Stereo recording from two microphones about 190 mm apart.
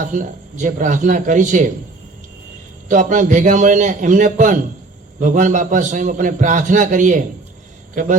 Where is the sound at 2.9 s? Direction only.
45° right (ahead or behind).